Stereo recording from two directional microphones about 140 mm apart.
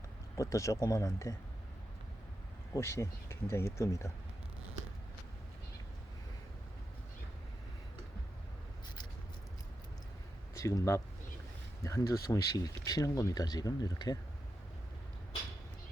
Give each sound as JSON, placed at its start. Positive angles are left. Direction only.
{"t": 0.3, "sound": "speech", "side_deg": 20}
{"t": 2.7, "sound": "speech", "side_deg": 20}
{"t": 10.5, "sound": "speech", "side_deg": 25}